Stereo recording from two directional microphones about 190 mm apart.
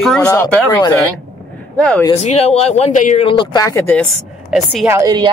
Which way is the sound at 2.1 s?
35° left (ahead or behind).